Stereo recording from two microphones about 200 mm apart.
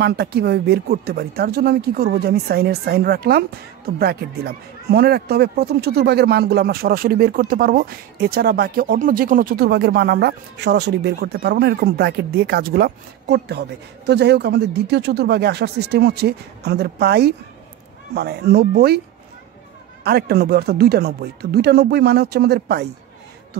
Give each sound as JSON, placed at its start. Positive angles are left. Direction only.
{"t": 0.0, "sound": "speech", "side_deg": -55}
{"t": 20.0, "sound": "speech", "side_deg": -55}